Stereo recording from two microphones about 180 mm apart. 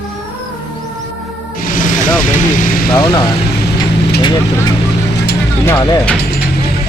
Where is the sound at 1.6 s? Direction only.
50° left (ahead or behind).